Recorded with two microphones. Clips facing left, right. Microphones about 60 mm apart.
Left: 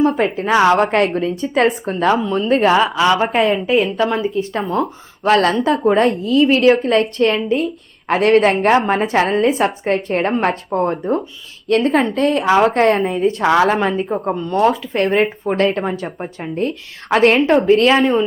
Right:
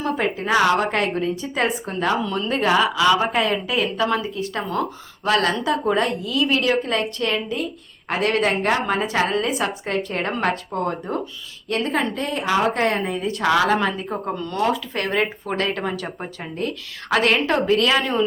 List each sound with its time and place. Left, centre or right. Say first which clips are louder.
0.2 s a woman's voice: left 5 dB; left
2.2 s a woman's voice: left 6 dB; left
2.5 s a woman's voice: left 5 dB; left
12.1 s a woman's voice: left 8 dB; left
13.1 s a woman's voice: left 6 dB; left
14.5 s a woman's voice: left 7 dB; left
15.8 s a woman's voice: left 4 dB; left